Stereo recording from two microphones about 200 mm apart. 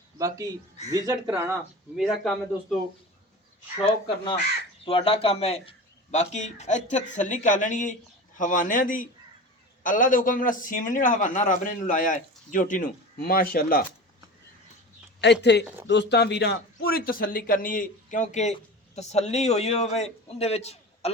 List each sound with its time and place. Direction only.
0.2 s a man's voice: 15° right (ahead or behind)
2.0 s a man's voice: centre (ahead or behind)
4.9 s a man's voice: 25° left (ahead or behind); by 13.8 s 45° left (ahead or behind)
15.2 s a man's voice: 60° left (ahead or behind); by 21.1 s 30° left (ahead or behind)